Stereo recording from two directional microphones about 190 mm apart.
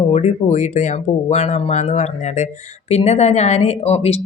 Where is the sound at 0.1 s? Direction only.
40° left (ahead or behind).